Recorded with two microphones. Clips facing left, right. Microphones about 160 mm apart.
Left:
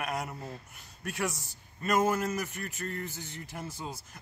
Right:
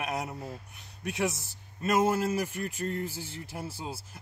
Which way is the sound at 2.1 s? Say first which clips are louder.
Right 3 dB; 30° right (ahead or behind).